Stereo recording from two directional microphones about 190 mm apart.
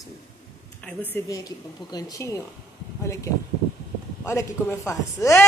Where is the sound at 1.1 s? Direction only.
20° left (ahead or behind).